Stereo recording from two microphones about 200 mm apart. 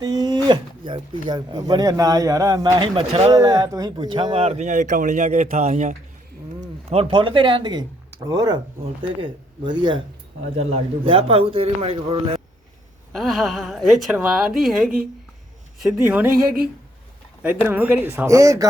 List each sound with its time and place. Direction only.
0.0 s a sound: 20° right (ahead or behind)
0.4 s speech: 25° right (ahead or behind)
3.3 s speech: 15° right (ahead or behind)
13.1 s a woman's voice: centre (ahead or behind)
17.7 s speech: 10° right (ahead or behind)